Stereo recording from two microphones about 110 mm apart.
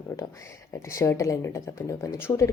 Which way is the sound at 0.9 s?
30° left (ahead or behind).